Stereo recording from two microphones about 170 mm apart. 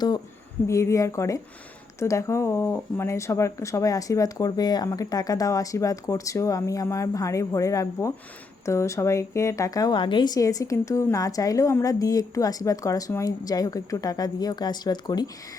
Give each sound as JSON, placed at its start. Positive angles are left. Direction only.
{"t": 0.7, "sound": "a woman's voice", "side_deg": 15}